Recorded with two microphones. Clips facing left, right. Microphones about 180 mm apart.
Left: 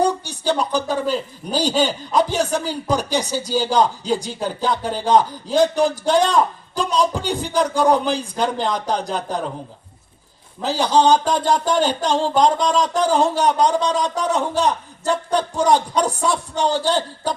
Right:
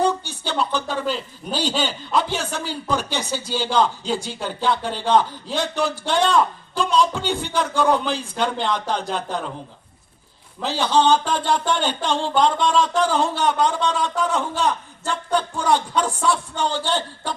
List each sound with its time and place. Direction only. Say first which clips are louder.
0.0 s speech: left 2 dB; 40° left (ahead or behind)
10.6 s speech: left 2 dB; 40° left (ahead or behind)